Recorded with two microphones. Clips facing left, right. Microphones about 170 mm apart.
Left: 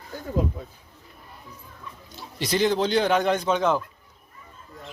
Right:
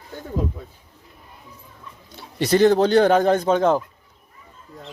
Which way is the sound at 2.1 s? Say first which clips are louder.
Right 7 dB; 55° right (ahead or behind).